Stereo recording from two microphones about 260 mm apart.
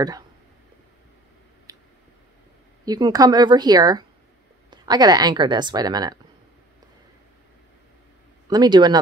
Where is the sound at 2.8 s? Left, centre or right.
Centre.